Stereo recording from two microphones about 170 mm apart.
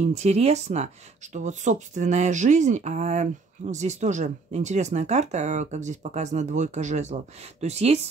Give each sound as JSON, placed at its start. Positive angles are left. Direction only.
{"t": 0.0, "sound": "speech", "side_deg": -40}